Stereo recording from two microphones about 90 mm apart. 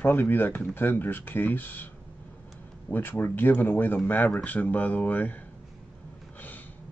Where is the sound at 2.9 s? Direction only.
25° left (ahead or behind).